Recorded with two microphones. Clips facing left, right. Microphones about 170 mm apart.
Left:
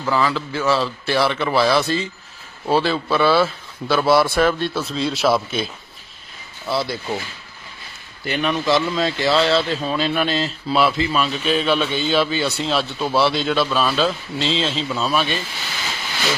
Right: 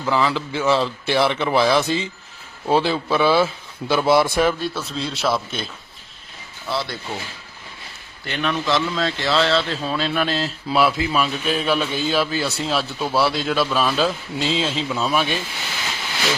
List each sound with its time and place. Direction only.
0.0 s a man's voice: 15° right (ahead or behind)
4.7 s speech: centre (ahead or behind)
6.7 s speech: 5° left (ahead or behind)
8.2 s speech: 5° left (ahead or behind); by 15.4 s 15° right (ahead or behind)